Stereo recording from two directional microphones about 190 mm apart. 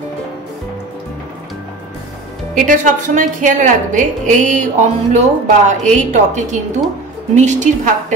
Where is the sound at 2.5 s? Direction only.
45° right (ahead or behind).